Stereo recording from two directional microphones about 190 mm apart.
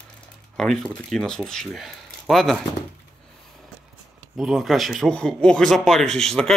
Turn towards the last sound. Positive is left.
turn(degrees=0)  # may be behind; listen again after turning